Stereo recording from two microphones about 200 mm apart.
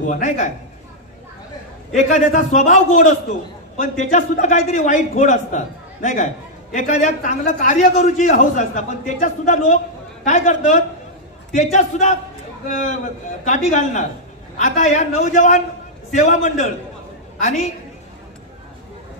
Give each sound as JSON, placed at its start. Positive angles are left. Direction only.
{"t": 0.1, "sound": "a man's voice", "side_deg": 40}
{"t": 2.0, "sound": "a man's voice", "side_deg": 35}
{"t": 13.5, "sound": "a man's voice", "side_deg": 40}